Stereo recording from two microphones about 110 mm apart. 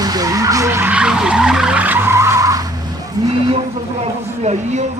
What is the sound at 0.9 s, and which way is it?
Vehicle, 10° right (ahead or behind).